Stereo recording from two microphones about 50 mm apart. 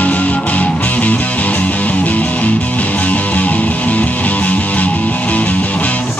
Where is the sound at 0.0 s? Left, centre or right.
Left.